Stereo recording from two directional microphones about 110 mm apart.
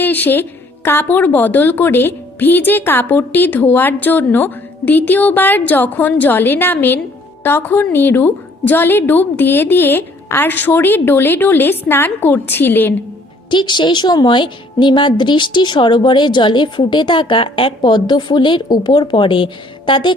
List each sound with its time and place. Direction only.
0.0 s a woman's voice: 15° left (ahead or behind)
13.5 s a woman's voice: 45° left (ahead or behind)